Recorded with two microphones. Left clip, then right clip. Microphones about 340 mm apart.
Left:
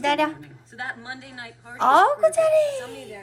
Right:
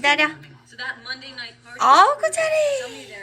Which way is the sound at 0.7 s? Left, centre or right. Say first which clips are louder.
Right 2 dB; centre.